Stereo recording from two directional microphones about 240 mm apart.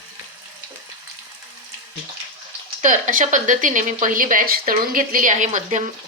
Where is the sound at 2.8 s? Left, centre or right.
Right.